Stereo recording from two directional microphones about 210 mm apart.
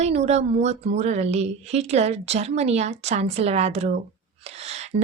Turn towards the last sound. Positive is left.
turn(degrees=-30)  # may be behind; listen again after turning